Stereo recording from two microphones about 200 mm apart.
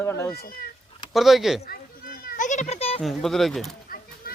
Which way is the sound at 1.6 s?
50° left (ahead or behind).